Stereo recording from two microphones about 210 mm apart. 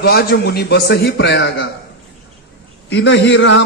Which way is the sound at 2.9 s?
60° left (ahead or behind).